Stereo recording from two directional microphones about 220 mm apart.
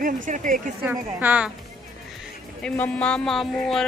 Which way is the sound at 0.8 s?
5° right (ahead or behind).